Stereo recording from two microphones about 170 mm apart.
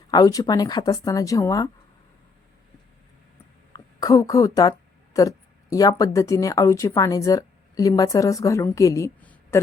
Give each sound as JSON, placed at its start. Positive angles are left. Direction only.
{"t": 0.1, "sound": "speech", "side_deg": 20}
{"t": 3.7, "sound": "a woman's voice", "side_deg": 20}